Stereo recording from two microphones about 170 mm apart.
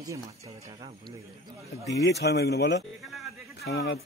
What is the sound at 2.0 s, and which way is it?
Speech, 80° left.